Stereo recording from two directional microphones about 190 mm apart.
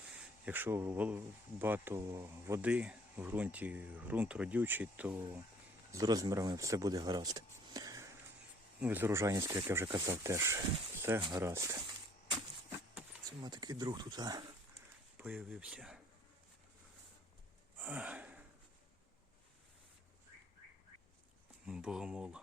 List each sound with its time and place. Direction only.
0.1 s speech: 10° right (ahead or behind)
5.9 s speech: 20° right (ahead or behind)
12.9 s a sound: 5° right (ahead or behind)
13.4 s speech: 20° right (ahead or behind)
15.2 s speech: 5° right (ahead or behind)
17.7 s gasp: 5° right (ahead or behind)
21.7 s speech: 5° right (ahead or behind)